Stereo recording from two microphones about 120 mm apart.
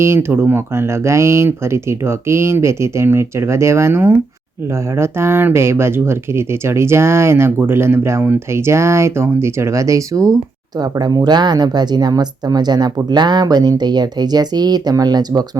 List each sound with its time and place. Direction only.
0.0 s speech: 20° right (ahead or behind)